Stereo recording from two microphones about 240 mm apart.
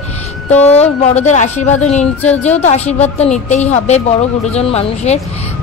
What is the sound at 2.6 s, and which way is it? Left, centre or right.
A woman's voice, left.